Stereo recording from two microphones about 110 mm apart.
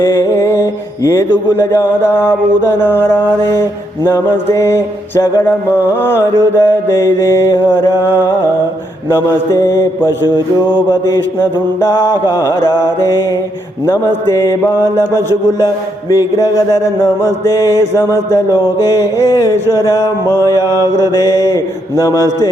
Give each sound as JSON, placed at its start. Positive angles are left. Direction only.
{"t": 0.0, "sound": "music", "side_deg": 20}
{"t": 4.0, "sound": "mantra", "side_deg": 25}
{"t": 10.7, "sound": "mantra", "side_deg": 45}
{"t": 13.8, "sound": "mantra", "side_deg": 25}
{"t": 15.3, "sound": "a man's voice", "side_deg": 35}
{"t": 17.4, "sound": "mantra", "side_deg": 25}
{"t": 18.3, "sound": "a man's voice", "side_deg": 30}
{"t": 19.8, "sound": "mantra", "side_deg": 25}
{"t": 20.6, "sound": "a man's voice", "side_deg": 30}